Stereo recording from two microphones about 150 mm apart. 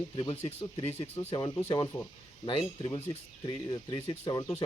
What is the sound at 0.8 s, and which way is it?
Speech, 45° left (ahead or behind).